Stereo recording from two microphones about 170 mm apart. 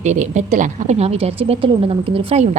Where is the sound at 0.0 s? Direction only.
45° right (ahead or behind).